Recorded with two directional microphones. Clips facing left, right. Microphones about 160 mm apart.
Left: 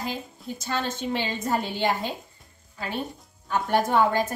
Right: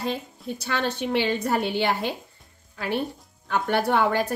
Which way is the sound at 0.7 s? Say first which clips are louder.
Right 2 dB; 70° right (ahead or behind).